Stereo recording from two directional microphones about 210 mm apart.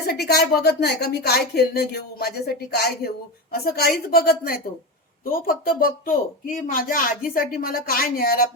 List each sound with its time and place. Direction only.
0.1 s speech: 50° left (ahead or behind)